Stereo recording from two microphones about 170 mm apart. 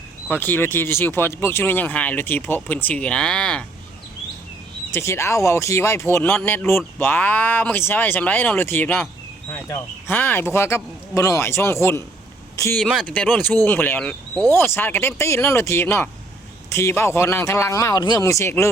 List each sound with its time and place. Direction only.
0.3 s speech: 10° left (ahead or behind)
4.9 s speech: 15° left (ahead or behind)
12.8 s speech: centre (ahead or behind)